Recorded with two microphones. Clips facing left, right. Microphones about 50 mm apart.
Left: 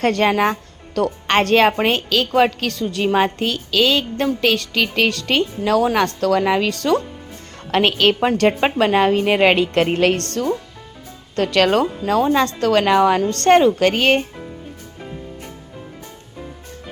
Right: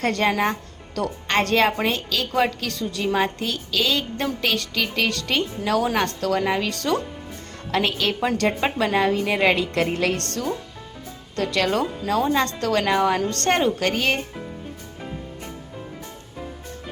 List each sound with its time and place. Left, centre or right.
0.0 s a woman's voice: left
11.5 s a woman's voice: left